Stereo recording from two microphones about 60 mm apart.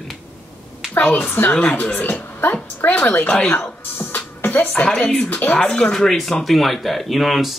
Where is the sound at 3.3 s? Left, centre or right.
Centre.